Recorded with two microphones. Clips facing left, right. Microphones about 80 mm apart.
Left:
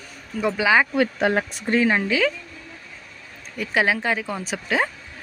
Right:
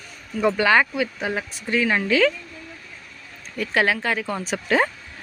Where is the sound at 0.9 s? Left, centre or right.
Left.